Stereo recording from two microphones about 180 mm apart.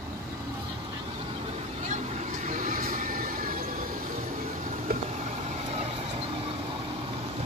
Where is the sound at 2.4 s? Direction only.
45° right (ahead or behind).